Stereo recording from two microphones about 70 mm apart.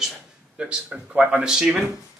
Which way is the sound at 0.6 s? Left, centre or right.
Centre.